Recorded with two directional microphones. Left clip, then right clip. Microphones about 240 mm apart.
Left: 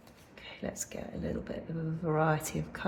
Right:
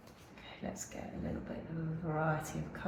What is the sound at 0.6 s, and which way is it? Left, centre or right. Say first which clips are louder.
Speech: left 5 dB; left.